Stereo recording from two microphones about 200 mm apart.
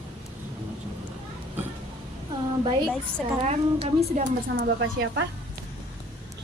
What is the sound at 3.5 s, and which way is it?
Speech, 35° right (ahead or behind).